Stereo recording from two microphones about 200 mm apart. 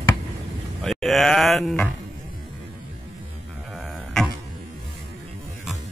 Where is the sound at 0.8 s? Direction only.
Centre (ahead or behind).